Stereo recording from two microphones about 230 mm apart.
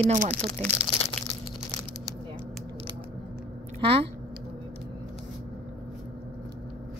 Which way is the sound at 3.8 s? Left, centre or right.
Right.